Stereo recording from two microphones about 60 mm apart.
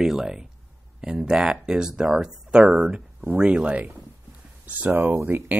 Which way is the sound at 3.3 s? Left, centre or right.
Right.